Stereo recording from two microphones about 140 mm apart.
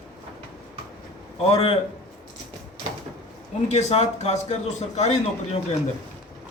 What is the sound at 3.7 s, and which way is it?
A man's voice, 50° left (ahead or behind).